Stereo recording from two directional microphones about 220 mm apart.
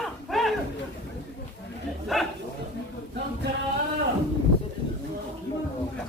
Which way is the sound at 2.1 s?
Centre (ahead or behind).